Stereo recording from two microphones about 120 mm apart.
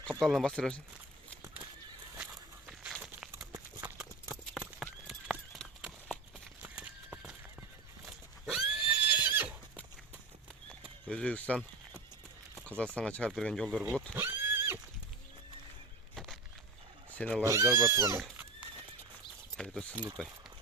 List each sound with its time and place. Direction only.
0.0 s speech: centre (ahead or behind)
2.1 s walk: 10° right (ahead or behind)
3.3 s a sound: 25° right (ahead or behind)
4.5 s horse: 5° right (ahead or behind)
6.6 s clip-clop: 10° right (ahead or behind)
8.4 s horse: 5° right (ahead or behind)
11.1 s speech: 10° left (ahead or behind)
13.7 s speech: 5° right (ahead or behind)
14.2 s neigh: 20° right (ahead or behind)
16.1 s a sound: centre (ahead or behind)
17.2 s speech: 10° left (ahead or behind)
17.4 s speech: 25° right (ahead or behind)
19.5 s speech: 5° left (ahead or behind)